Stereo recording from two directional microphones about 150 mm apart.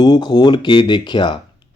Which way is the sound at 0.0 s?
30° left (ahead or behind).